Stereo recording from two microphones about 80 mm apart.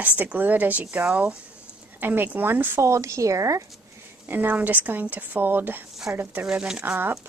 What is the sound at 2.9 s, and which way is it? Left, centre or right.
Speech, right.